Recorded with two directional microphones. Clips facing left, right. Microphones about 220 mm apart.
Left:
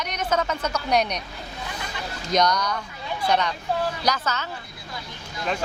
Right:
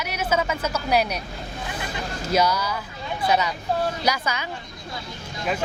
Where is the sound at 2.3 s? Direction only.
5° right (ahead or behind).